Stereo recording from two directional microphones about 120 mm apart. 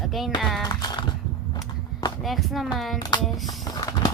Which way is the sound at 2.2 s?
Centre (ahead or behind).